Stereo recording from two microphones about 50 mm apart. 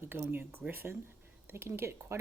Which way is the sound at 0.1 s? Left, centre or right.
Right.